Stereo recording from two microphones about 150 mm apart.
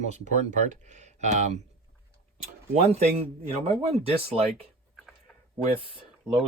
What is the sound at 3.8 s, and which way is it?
Speech, 40° right (ahead or behind).